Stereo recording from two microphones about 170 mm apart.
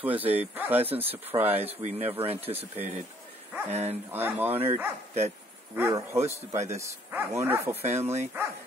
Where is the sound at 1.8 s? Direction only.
40° right (ahead or behind).